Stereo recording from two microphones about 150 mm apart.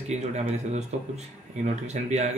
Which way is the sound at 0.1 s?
50° right (ahead or behind).